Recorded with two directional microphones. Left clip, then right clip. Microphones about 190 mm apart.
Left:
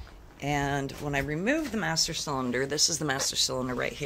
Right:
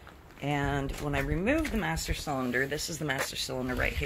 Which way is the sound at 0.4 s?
15° left (ahead or behind).